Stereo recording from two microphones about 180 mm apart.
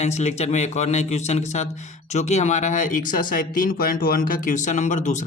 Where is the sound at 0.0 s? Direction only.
40° left (ahead or behind).